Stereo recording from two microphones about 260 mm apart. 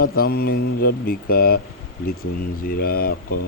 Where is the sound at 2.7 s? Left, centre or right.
Left.